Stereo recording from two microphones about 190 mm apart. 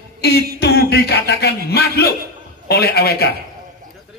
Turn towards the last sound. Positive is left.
turn(degrees=55)  # may be behind; listen again after turning